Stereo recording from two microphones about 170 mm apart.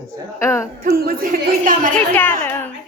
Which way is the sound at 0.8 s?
60° right (ahead or behind).